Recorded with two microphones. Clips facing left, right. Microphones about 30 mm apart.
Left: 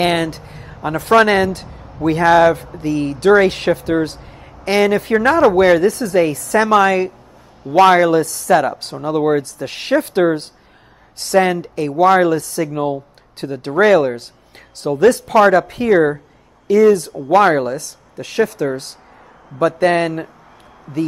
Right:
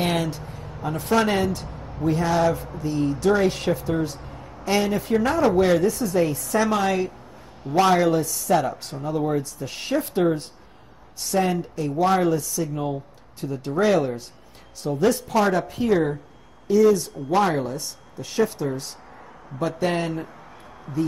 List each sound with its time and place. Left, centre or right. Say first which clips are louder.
0.0 s speech: left 7 dB; left
0.5 s a sound: left 1 dB; left
0.8 s speech: left 9 dB; left
7.7 s speech: left 8 dB; left